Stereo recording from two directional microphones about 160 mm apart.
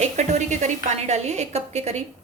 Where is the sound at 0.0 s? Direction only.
45° right (ahead or behind).